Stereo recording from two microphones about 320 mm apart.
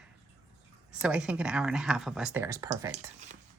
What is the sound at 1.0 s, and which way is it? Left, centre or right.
Speech, centre.